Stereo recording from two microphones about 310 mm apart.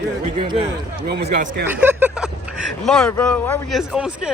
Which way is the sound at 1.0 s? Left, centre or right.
Right.